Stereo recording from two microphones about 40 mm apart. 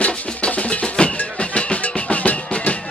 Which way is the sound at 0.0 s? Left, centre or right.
Left.